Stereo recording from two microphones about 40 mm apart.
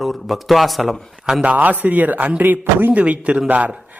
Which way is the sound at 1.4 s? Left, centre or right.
Right.